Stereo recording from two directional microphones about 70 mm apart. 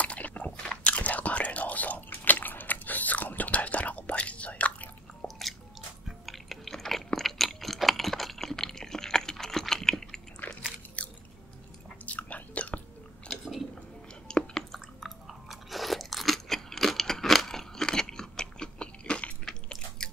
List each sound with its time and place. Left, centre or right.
0.0 s whispering: centre
5.2 s a sound: centre
6.0 s chewing: centre
10.5 s biting: left
11.0 s biting: centre
12.1 s chewing: left
13.3 s chewing: centre